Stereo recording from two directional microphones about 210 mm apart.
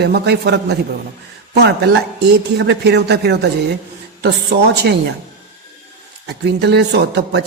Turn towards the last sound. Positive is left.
turn(degrees=-55)  # may be behind; listen again after turning